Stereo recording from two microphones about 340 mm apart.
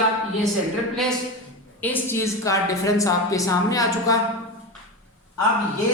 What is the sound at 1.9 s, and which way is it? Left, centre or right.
A woman's voice, centre.